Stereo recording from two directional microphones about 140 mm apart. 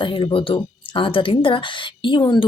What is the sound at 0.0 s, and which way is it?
Speech, 35° left (ahead or behind).